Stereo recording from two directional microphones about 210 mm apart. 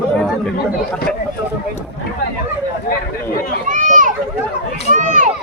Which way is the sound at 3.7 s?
35° right (ahead or behind).